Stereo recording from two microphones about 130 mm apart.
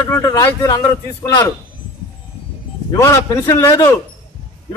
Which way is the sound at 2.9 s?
25° left (ahead or behind).